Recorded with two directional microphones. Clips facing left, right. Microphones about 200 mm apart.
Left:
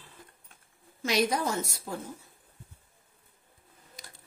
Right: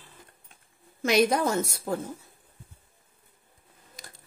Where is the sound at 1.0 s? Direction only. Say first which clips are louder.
Right 5 dB; 55° right (ahead or behind).